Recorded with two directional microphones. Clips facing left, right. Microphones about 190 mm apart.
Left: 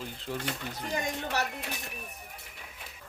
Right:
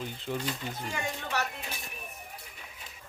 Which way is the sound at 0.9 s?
35° left (ahead or behind).